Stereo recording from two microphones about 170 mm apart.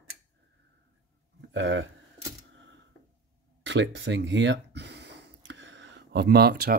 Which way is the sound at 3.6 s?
90° right.